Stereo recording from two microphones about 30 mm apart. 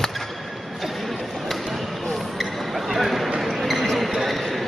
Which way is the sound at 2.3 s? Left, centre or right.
Centre.